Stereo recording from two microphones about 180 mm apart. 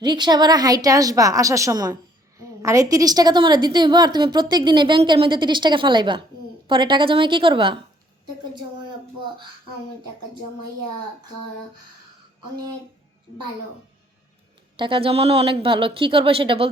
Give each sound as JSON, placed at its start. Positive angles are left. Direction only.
{"t": 0.0, "sound": "a woman's voice", "side_deg": -25}
{"t": 14.8, "sound": "a woman's voice", "side_deg": -30}